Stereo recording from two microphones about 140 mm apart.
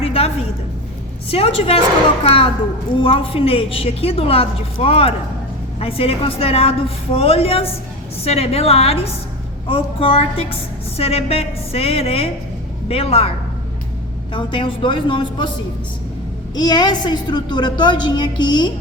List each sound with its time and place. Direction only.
0.0 s a sound: 45° left (ahead or behind)
1.3 s a woman's voice: 45° left (ahead or behind)
14.3 s a woman's voice: 35° left (ahead or behind)
16.6 s a woman's voice: 30° left (ahead or behind)